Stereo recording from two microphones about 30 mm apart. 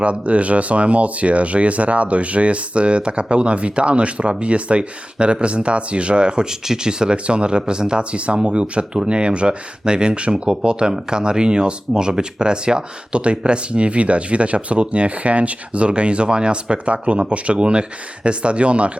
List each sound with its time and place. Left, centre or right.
0.0 s speech: right